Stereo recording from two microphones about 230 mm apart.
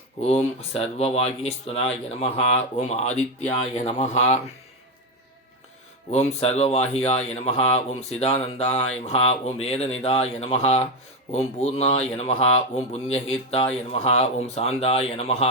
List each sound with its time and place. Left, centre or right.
0.2 s speech: left
6.1 s speech: left